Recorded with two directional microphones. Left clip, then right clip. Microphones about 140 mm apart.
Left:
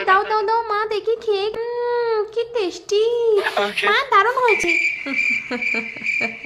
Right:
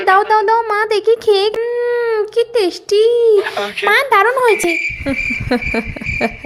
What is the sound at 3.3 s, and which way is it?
Speech, centre (ahead or behind).